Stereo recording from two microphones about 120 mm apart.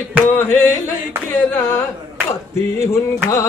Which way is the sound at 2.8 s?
25° left (ahead or behind).